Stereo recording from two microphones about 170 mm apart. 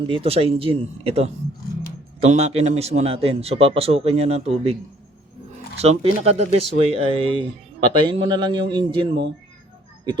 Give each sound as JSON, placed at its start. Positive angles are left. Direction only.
{"t": 0.1, "sound": "a man's voice", "side_deg": -35}
{"t": 5.8, "sound": "a man's voice", "side_deg": -40}